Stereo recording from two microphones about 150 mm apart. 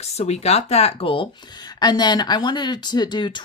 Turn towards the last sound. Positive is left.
turn(degrees=30)  # may be behind; listen again after turning